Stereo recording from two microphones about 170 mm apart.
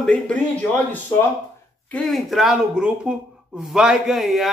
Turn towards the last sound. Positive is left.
turn(degrees=0)  # may be behind; listen again after turning